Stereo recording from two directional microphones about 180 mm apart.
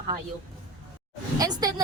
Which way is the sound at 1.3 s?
20° right (ahead or behind).